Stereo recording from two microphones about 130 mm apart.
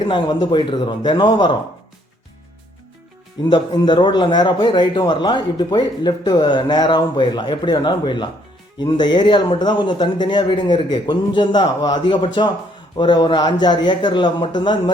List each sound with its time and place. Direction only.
0.0 s speech: 35° left (ahead or behind)
3.5 s speech: 35° left (ahead or behind)